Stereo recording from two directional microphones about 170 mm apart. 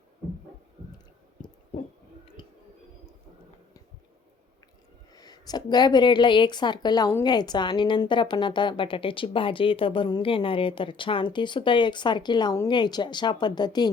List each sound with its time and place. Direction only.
2.2 s music: 30° left (ahead or behind)
5.1 s a woman's voice: 25° left (ahead or behind)